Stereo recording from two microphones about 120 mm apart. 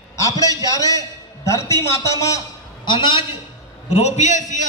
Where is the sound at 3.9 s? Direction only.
65° left (ahead or behind); by 4.6 s 90° left.